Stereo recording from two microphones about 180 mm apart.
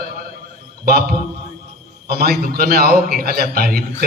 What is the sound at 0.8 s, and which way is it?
A man's voice, 55° right (ahead or behind).